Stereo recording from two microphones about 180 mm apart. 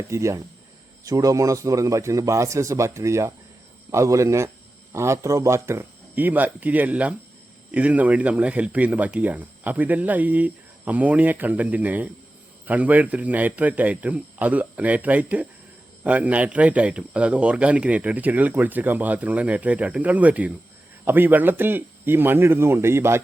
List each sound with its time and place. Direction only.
0.1 s speech: 15° right (ahead or behind)